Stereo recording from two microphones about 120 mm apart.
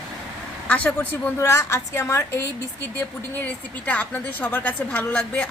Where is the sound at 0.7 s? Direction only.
10° left (ahead or behind).